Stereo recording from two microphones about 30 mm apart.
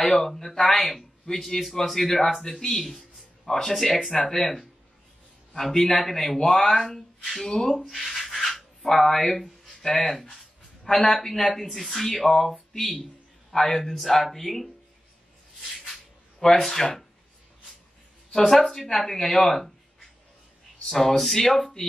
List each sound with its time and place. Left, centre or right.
0.0 s speech: centre
7.0 s a sound: centre
7.4 s speech: centre
8.0 s a sound: centre
8.9 s speech: centre
10.3 s a sound: centre
11.2 s speech: centre
13.6 s speech: centre
16.3 s speech: centre
18.4 s speech: centre
20.9 s speech: centre